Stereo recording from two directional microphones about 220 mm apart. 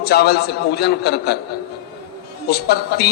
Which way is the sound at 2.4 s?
45° left (ahead or behind).